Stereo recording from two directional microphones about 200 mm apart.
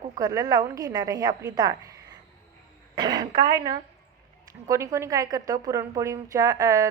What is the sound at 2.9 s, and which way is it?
A woman's voice, 20° right (ahead or behind).